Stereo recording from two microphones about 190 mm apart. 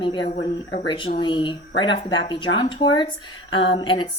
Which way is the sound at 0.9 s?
25° left (ahead or behind).